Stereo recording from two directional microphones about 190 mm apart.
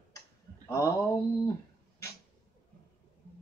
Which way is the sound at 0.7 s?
20° left (ahead or behind).